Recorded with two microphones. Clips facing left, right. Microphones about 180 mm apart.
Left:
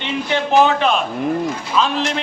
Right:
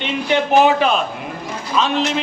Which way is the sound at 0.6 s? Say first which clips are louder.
Right 1 dB; 5° right (ahead or behind).